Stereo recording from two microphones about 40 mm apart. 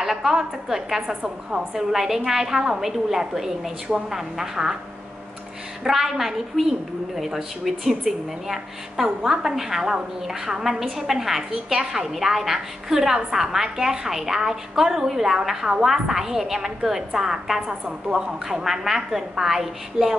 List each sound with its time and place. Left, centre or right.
0.0 s a woman's voice: centre
5.9 s a woman's voice: centre
9.6 s a woman's voice: centre